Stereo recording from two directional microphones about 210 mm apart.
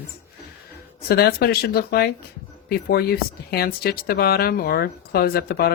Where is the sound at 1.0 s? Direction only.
45° left (ahead or behind).